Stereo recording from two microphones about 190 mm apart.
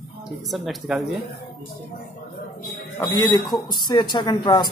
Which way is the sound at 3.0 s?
20° left (ahead or behind).